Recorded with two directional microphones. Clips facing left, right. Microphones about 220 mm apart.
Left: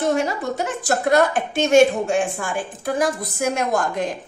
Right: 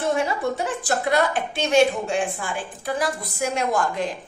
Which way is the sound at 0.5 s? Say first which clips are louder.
Left 2 dB; 45° left (ahead or behind).